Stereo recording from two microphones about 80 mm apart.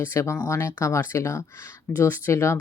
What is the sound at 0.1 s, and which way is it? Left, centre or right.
Speech, left.